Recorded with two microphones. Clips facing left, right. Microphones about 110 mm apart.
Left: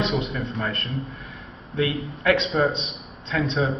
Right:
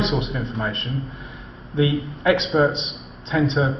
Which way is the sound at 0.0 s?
25° right (ahead or behind).